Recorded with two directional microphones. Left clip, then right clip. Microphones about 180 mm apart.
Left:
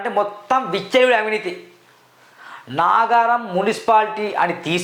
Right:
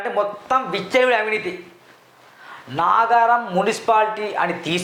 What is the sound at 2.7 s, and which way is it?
A man's voice, 30° left (ahead or behind).